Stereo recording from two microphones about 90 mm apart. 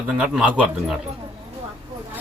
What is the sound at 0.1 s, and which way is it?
Speech, 10° right (ahead or behind).